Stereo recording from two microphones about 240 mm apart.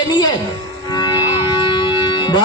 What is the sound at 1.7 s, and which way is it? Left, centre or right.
Music, centre.